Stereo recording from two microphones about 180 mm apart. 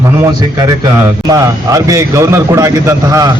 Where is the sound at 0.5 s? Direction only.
20° right (ahead or behind).